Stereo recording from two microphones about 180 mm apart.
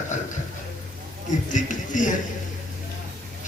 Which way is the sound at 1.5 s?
45° left (ahead or behind).